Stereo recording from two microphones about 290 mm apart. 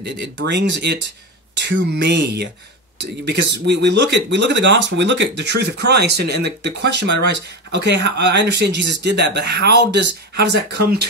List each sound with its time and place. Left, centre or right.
0.0 s speech: right